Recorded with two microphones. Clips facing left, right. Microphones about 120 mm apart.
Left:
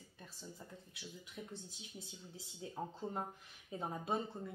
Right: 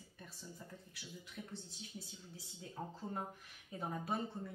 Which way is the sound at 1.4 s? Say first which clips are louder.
Left 1 dB; 20° left (ahead or behind).